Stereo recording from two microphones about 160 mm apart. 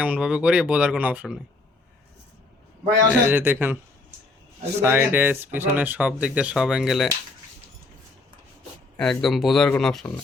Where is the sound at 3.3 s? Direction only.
10° right (ahead or behind).